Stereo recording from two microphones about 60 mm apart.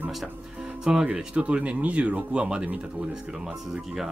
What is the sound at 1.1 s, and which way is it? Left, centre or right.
Speech, right.